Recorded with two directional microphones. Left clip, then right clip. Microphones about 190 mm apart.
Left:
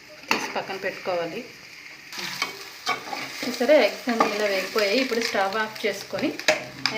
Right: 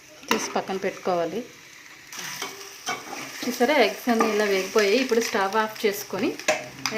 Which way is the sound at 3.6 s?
50° right (ahead or behind).